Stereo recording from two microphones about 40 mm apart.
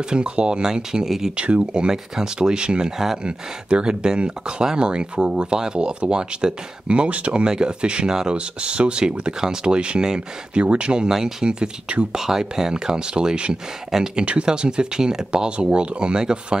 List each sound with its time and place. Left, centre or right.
0.0 s speech: right
7.4 s speech: centre
11.1 s speech: centre
11.4 s speech: right
12.1 s speech: centre